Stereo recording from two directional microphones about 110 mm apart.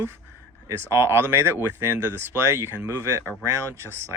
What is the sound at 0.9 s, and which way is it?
Speech, 20° right (ahead or behind).